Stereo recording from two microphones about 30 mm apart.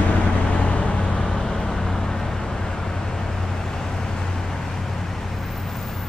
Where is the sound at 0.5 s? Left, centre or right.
Left.